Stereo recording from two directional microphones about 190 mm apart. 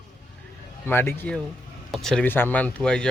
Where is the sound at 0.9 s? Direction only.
10° left (ahead or behind).